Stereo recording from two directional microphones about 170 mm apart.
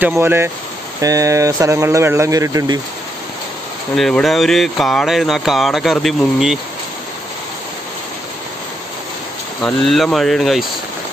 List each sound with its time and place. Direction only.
0.0 s speech: 15° right (ahead or behind)
3.9 s speech: centre (ahead or behind)
9.6 s speech: 5° left (ahead or behind)